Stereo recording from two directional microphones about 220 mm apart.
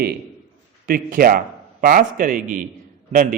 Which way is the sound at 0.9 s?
40° right (ahead or behind).